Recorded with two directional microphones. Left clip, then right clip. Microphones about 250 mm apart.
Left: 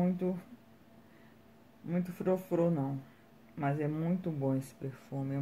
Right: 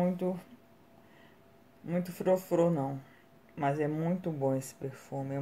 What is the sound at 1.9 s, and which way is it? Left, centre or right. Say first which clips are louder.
Speech: right 4 dB; centre.